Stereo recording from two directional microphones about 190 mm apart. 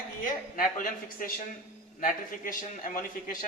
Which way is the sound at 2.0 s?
45° left (ahead or behind).